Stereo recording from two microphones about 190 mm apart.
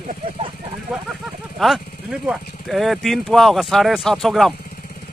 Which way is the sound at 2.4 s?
55° left (ahead or behind).